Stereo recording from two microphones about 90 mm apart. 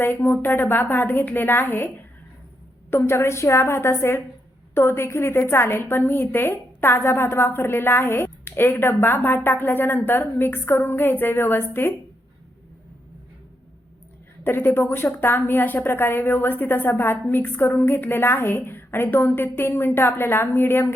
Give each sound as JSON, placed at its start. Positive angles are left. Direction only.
{"t": 0.0, "sound": "a woman's voice", "side_deg": 25}
{"t": 14.4, "sound": "a woman's voice", "side_deg": 25}